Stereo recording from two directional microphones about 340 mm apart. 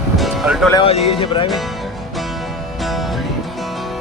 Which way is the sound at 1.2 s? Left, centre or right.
Centre.